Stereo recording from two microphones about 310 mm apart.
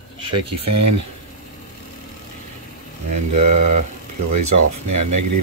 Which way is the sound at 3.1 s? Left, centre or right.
Right.